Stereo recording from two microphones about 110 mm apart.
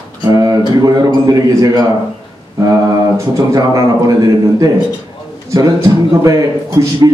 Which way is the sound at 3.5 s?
35° right (ahead or behind).